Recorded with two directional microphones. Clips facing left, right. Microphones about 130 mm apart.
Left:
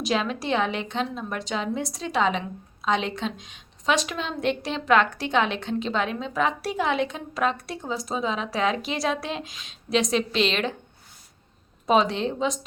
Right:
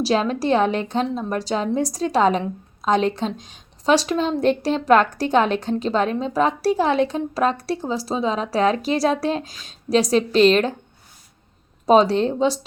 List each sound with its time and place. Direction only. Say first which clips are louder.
0.0 s a woman's voice: right 6 dB; 35° right (ahead or behind)
11.9 s a woman's voice: right 6 dB; 40° right (ahead or behind)